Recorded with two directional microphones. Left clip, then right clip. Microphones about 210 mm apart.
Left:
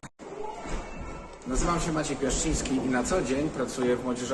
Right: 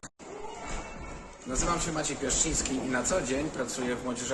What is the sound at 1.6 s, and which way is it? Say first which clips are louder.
A man's voice: left 2 dB; centre (ahead or behind).